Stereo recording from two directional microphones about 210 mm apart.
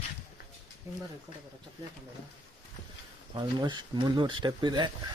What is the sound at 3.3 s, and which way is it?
Speech, 20° right (ahead or behind).